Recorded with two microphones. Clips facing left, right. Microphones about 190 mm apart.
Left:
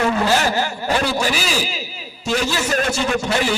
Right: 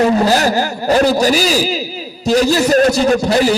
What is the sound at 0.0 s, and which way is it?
A man's voice, 40° right (ahead or behind).